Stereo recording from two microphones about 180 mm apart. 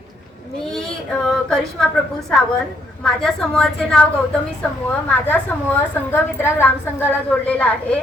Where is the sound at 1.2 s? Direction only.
5° left (ahead or behind).